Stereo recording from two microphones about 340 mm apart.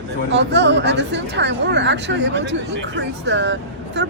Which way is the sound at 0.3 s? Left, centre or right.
Right.